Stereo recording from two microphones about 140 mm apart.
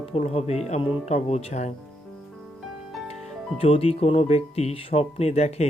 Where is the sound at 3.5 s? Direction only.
45° left (ahead or behind).